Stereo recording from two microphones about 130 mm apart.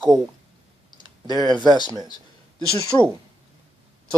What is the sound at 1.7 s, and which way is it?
Speech, 35° left (ahead or behind).